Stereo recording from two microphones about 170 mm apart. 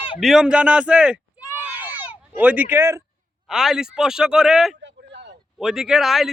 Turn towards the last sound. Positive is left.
turn(degrees=0)  # may be behind; listen again after turning